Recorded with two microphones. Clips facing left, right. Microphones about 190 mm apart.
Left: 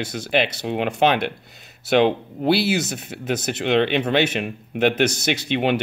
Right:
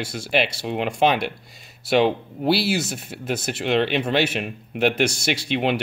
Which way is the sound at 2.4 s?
55° left (ahead or behind).